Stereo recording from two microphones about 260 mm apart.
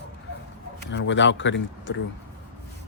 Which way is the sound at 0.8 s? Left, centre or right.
Left.